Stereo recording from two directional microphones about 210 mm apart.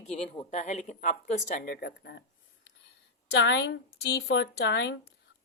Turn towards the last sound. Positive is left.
turn(degrees=55)  # may be behind; listen again after turning